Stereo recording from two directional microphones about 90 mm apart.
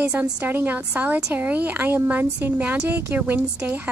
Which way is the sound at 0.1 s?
20° right (ahead or behind).